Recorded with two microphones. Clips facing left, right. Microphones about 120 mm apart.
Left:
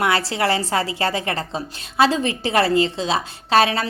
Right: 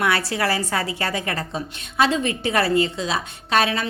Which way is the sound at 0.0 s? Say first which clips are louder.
Left 2 dB; 25° left (ahead or behind).